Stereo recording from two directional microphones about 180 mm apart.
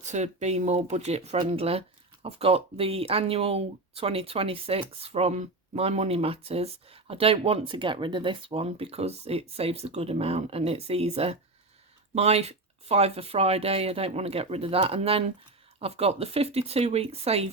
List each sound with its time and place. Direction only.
0.0 s speech: 40° right (ahead or behind)